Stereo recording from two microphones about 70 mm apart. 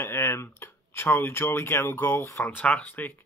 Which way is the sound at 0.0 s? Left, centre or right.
Left.